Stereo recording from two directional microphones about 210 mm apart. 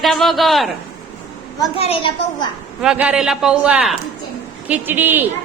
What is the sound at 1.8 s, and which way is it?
Speech, 25° left (ahead or behind).